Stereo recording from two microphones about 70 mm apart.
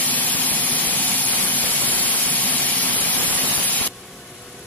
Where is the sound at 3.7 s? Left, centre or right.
Left.